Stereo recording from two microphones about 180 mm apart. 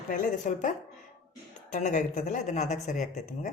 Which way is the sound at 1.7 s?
45° left (ahead or behind).